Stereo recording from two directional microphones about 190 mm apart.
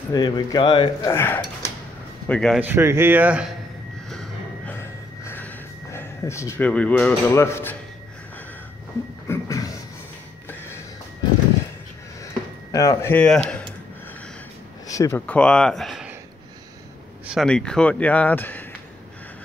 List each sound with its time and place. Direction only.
0.1 s speech: 20° left (ahead or behind)
1.1 s a man's voice: 10° left (ahead or behind)
2.6 s speech: 10° right (ahead or behind)
4.1 s a sound: centre (ahead or behind)
4.7 s a sound: 10° left (ahead or behind)
9.3 s a sound: 15° left (ahead or behind)
12.7 s speech: 15° left (ahead or behind)
14.9 s speech: 15° left (ahead or behind); by 16.1 s centre (ahead or behind)
17.3 s speech: centre (ahead or behind)